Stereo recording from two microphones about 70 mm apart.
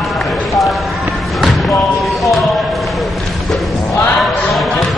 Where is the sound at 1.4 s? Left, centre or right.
Centre.